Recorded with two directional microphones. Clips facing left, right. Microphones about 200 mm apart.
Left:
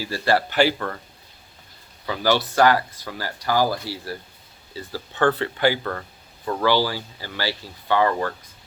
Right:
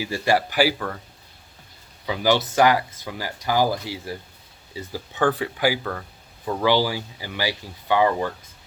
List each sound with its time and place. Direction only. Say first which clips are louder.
0.0 s speech: even; 15° right (ahead or behind)
2.0 s speech: right 1 dB; 15° right (ahead or behind)